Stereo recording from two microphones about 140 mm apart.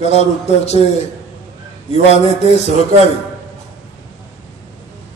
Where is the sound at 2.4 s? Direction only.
50° left (ahead or behind).